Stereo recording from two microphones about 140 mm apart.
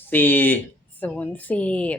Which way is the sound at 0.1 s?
15° left (ahead or behind).